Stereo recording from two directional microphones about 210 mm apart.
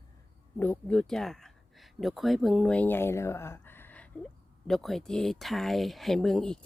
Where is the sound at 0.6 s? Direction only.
5° left (ahead or behind).